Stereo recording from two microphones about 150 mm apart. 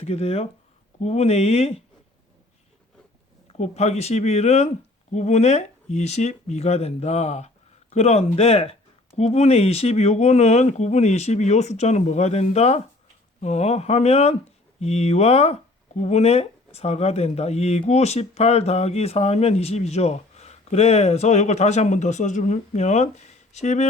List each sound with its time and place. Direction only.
0.0 s speech: 45° left (ahead or behind)
3.4 s speech: 45° left (ahead or behind)